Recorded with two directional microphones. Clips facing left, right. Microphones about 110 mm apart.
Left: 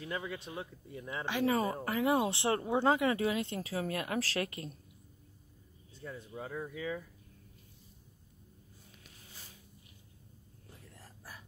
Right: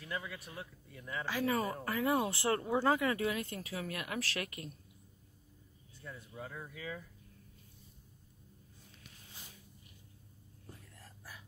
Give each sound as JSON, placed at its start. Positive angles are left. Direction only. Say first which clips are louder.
{"t": 0.0, "sound": "speech", "louder": "left 3 dB", "side_deg": 25}
{"t": 5.9, "sound": "speech", "louder": "left 4 dB", "side_deg": 25}